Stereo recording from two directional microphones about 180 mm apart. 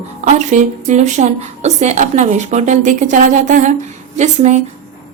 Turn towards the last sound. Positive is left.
turn(degrees=-40)  # may be behind; listen again after turning